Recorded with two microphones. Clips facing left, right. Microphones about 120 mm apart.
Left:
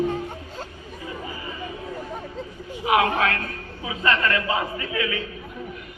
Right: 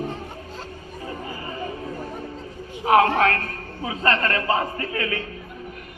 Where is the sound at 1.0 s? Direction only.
45° right (ahead or behind).